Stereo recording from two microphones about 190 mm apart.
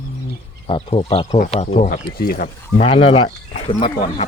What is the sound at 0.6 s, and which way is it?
Speech, 30° left (ahead or behind).